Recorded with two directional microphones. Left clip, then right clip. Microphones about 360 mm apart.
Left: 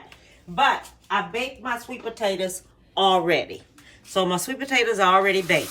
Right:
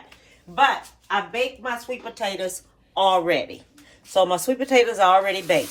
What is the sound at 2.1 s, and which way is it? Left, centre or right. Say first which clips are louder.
A woman's voice: left 3 dB; centre.